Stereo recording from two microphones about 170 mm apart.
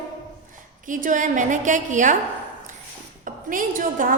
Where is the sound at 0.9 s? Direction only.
50° right (ahead or behind).